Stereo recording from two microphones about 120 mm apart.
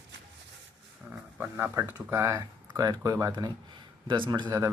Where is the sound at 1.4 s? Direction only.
15° right (ahead or behind).